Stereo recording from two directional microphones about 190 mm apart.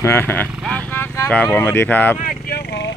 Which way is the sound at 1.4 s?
10° left (ahead or behind).